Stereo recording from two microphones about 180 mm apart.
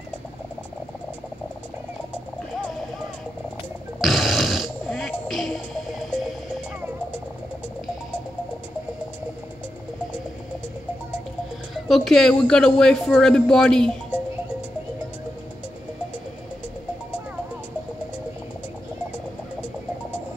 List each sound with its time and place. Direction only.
4.0 s music: centre (ahead or behind)
11.7 s speech: centre (ahead or behind)